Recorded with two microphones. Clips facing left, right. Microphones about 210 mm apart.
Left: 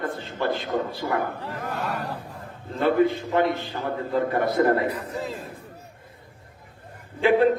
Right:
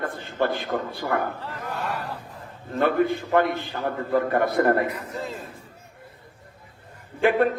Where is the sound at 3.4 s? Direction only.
20° left (ahead or behind).